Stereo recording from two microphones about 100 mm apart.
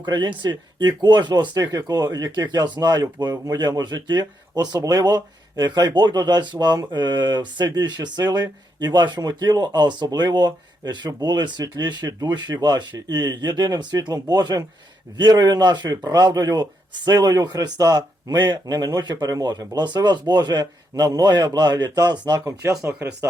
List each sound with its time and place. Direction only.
0.0 s speech: 50° right (ahead or behind); by 23.0 s 30° right (ahead or behind)